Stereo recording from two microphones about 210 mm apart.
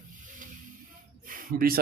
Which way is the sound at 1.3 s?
45° right (ahead or behind).